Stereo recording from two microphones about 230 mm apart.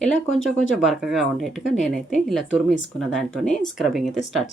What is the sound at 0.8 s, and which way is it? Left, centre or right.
Speech, centre.